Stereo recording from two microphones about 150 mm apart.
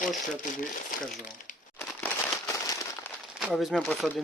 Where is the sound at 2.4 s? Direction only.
20° left (ahead or behind).